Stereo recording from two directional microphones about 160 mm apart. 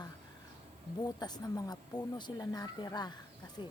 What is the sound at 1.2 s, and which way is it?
Speech, 25° left (ahead or behind).